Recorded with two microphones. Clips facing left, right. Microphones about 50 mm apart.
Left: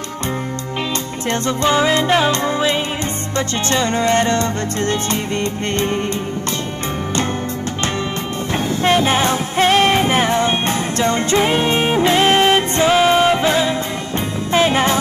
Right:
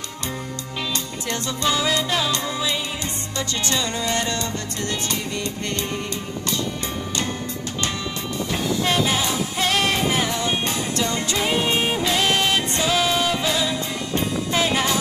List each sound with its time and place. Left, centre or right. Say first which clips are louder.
1.3 s music: left 7 dB; left
8.8 s music: left 9 dB; left
14.5 s jingle bell: left 8 dB; left